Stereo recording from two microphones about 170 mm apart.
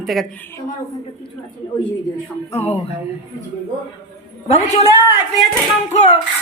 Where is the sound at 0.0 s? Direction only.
Centre (ahead or behind).